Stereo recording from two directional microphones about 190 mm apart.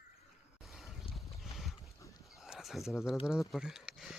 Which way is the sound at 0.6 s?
Centre (ahead or behind).